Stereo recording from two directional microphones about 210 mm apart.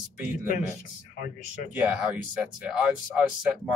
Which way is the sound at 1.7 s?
5° right (ahead or behind).